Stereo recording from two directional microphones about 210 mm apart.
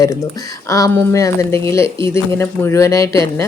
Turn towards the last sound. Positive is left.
turn(degrees=15)  # may be behind; listen again after turning